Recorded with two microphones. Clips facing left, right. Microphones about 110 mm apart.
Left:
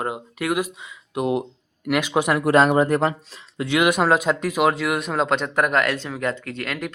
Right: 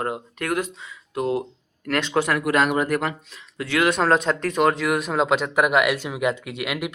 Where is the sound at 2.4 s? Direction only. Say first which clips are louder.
Left 4 dB; 30° left (ahead or behind).